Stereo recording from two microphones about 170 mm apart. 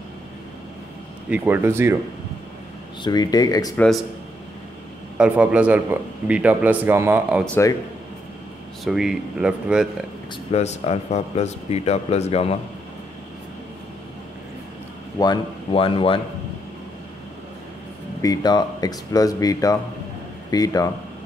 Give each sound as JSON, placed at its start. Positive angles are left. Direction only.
{"t": 1.3, "sound": "a man's voice", "side_deg": -10}
{"t": 3.0, "sound": "speech", "side_deg": 25}
{"t": 3.7, "sound": "speech", "side_deg": 5}
{"t": 5.1, "sound": "a man's voice", "side_deg": -5}
{"t": 8.8, "sound": "speech", "side_deg": 0}
{"t": 10.5, "sound": "speech", "side_deg": 40}
{"t": 15.1, "sound": "speech", "side_deg": 25}
{"t": 18.2, "sound": "speech", "side_deg": 20}